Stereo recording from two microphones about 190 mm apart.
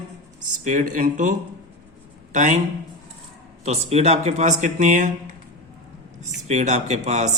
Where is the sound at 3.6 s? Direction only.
35° right (ahead or behind).